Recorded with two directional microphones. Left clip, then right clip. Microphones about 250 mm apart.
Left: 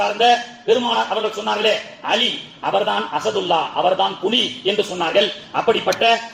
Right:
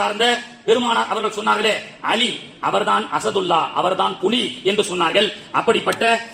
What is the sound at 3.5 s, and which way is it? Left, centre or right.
A man's voice, right.